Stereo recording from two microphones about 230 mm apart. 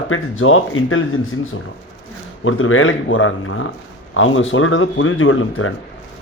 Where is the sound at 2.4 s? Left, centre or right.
Left.